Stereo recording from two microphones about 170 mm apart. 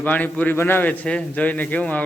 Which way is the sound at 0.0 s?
10° left (ahead or behind).